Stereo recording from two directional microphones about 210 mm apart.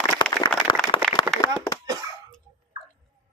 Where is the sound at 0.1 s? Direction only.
20° left (ahead or behind).